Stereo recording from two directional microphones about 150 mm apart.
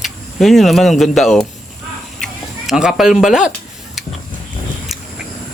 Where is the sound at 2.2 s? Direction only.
5° right (ahead or behind).